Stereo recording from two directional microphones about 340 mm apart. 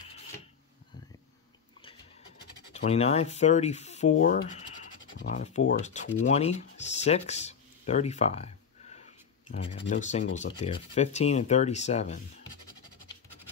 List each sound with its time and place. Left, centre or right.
2.7 s speech: centre